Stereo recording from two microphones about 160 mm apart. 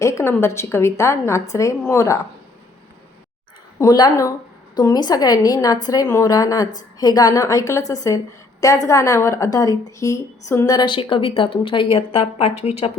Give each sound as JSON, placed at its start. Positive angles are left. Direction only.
{"t": 0.0, "sound": "a woman's voice", "side_deg": 15}
{"t": 3.8, "sound": "a woman's voice", "side_deg": 25}